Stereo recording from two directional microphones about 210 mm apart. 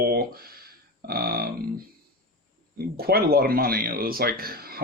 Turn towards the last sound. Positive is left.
turn(degrees=-45)  # may be behind; listen again after turning